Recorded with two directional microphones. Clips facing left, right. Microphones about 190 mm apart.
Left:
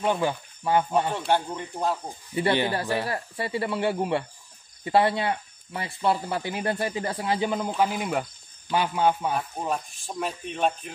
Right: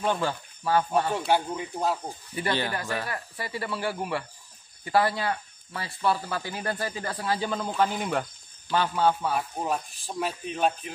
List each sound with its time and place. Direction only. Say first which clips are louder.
0.0 s speech: left 2 dB; 15° left (ahead or behind)
1.1 s speech: even; 5° right (ahead or behind)
2.3 s speech: left 5 dB; 20° left (ahead or behind)
9.3 s speech: even; 5° right (ahead or behind)